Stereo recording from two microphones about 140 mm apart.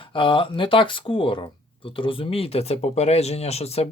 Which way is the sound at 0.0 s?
40° left (ahead or behind).